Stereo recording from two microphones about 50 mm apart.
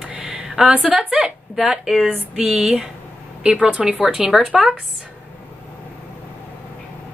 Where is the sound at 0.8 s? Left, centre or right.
Centre.